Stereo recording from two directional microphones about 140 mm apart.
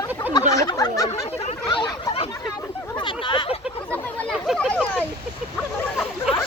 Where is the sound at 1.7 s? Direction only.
35° left (ahead or behind).